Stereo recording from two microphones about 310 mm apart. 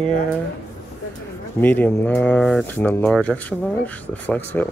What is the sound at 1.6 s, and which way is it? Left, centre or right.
Speech, centre.